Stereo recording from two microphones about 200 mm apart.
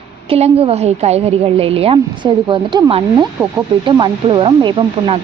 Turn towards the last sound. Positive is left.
turn(degrees=-25)  # may be behind; listen again after turning